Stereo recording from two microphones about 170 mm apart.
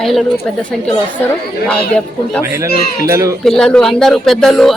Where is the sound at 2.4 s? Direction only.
15° right (ahead or behind).